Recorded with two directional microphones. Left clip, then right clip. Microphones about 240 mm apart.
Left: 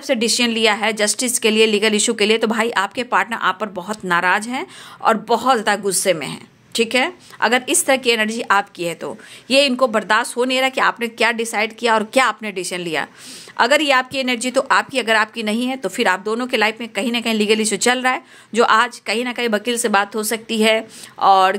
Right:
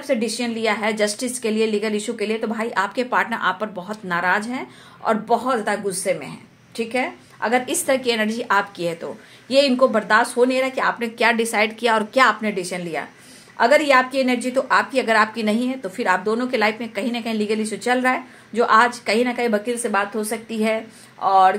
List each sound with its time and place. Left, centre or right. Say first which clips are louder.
0.0 s speech: left 5 dB; left